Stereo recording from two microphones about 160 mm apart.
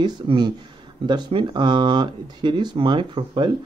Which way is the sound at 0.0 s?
30° right (ahead or behind).